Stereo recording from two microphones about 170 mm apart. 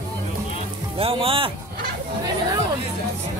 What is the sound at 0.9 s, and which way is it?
Speech, 35° right (ahead or behind).